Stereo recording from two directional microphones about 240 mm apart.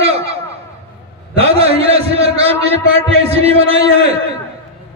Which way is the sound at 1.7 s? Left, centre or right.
Right.